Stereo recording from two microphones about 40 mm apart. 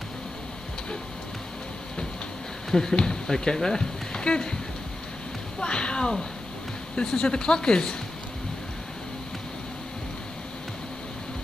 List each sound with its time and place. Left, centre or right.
2.7 s speech: centre
5.6 s speech: left